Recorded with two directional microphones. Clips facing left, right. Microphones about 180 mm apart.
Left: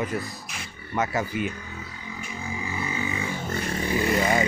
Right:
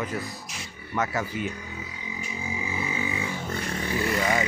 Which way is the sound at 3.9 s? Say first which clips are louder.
Left 3 dB; 20° left (ahead or behind).